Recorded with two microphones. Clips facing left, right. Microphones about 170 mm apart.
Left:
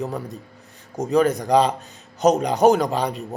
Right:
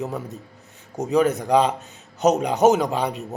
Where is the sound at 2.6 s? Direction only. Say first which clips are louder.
Left 1 dB; 5° right (ahead or behind).